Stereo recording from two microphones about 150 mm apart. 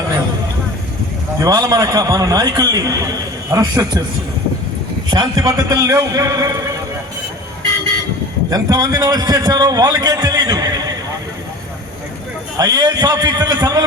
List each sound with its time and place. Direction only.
1.4 s a man's voice: 25° right (ahead or behind)
5.1 s a man's voice: 25° right (ahead or behind)
8.4 s a man's voice: 25° right (ahead or behind)
12.5 s a man's voice: 25° right (ahead or behind)